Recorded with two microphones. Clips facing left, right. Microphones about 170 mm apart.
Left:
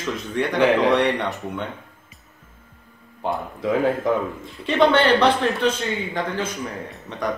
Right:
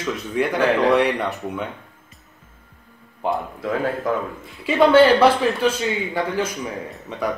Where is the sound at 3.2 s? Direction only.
Centre (ahead or behind).